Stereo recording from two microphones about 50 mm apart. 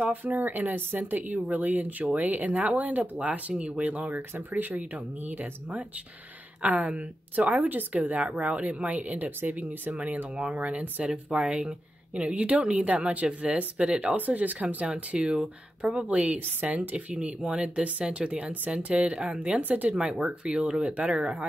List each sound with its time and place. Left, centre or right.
0.0 s a woman's voice: right
11.1 s a woman's voice: centre
14.1 s speech: right
15.1 s a woman's voice: centre
19.6 s speech: right
19.9 s a woman's voice: centre